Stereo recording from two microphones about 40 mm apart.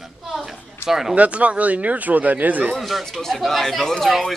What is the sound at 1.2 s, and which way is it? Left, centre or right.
Speech, right.